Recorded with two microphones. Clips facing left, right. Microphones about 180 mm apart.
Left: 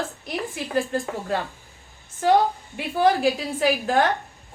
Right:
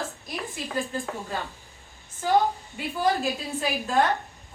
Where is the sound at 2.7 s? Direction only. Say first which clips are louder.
Left 7 dB; 80° left.